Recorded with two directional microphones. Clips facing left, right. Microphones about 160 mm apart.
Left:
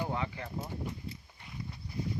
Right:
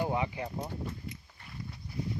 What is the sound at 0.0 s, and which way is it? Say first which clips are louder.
Speech: right 4 dB; 15° right (ahead or behind).